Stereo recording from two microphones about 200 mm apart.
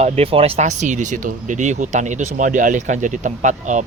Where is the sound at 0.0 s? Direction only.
30° right (ahead or behind).